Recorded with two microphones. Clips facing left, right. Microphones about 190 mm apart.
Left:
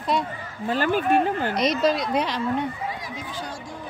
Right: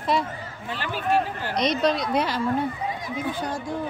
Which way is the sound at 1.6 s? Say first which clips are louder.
Right 1 dB; centre (ahead or behind).